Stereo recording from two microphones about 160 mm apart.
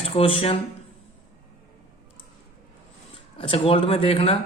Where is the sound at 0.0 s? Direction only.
35° left (ahead or behind).